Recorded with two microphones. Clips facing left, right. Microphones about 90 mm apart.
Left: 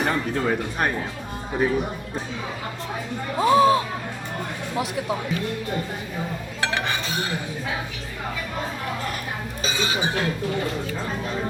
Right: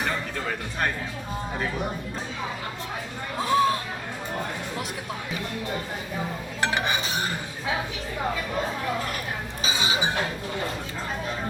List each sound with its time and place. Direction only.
3.3 s speech: 5° left (ahead or behind)
6.7 s dishes: 15° right (ahead or behind)
9.6 s speech: 15° right (ahead or behind)